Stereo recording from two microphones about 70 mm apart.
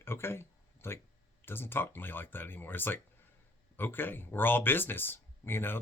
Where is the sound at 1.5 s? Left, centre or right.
Left.